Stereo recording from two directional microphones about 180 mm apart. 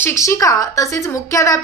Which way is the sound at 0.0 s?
15° left (ahead or behind).